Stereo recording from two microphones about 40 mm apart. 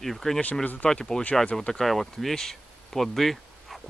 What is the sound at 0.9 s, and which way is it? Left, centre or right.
Speech, centre.